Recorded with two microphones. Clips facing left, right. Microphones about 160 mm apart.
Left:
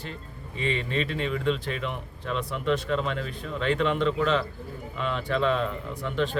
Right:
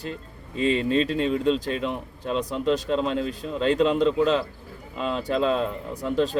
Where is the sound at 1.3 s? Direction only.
35° right (ahead or behind).